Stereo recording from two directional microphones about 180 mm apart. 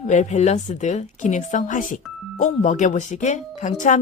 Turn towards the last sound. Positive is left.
turn(degrees=45)  # may be behind; listen again after turning